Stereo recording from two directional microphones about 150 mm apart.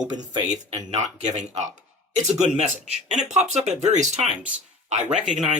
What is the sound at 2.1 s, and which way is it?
A man's voice, 50° right (ahead or behind).